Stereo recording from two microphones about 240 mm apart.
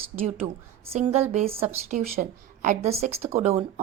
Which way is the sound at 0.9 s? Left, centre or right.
Right.